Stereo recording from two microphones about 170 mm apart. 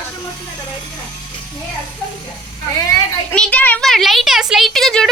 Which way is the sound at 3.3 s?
5° left (ahead or behind).